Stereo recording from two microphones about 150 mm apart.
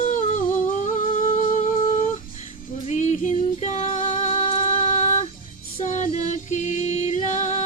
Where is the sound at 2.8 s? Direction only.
55° left (ahead or behind).